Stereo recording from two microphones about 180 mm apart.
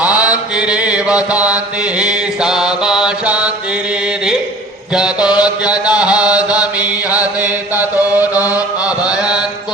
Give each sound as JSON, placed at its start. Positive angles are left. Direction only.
{"t": 0.0, "sound": "mantra", "side_deg": -5}
{"t": 4.9, "sound": "mantra", "side_deg": -5}
{"t": 6.6, "sound": "chant", "side_deg": 20}
{"t": 8.8, "sound": "chant", "side_deg": -5}